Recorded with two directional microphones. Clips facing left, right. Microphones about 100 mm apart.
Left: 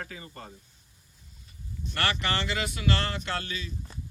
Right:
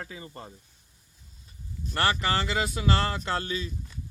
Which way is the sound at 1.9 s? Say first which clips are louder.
Right 3 dB; 30° right (ahead or behind).